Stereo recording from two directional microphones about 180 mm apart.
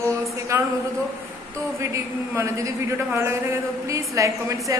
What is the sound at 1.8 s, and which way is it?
A man's voice, 15° right (ahead or behind).